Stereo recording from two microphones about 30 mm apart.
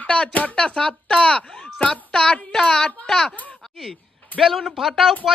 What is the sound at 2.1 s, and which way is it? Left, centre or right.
Speech, left.